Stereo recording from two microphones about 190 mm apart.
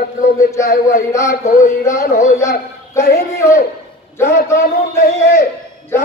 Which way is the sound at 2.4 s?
15° left (ahead or behind).